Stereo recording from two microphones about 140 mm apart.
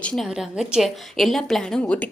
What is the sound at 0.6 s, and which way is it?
A woman's voice, centre (ahead or behind).